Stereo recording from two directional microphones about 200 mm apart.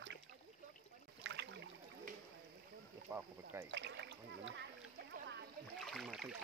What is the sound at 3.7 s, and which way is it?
Speech, 60° right (ahead or behind).